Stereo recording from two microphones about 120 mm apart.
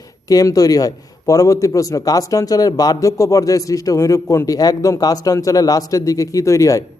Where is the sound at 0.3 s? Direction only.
30° left (ahead or behind).